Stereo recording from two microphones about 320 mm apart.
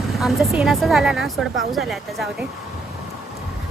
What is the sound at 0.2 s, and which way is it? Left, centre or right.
A woman's voice, centre.